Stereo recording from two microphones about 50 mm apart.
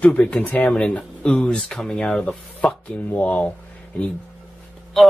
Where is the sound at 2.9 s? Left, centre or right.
Left.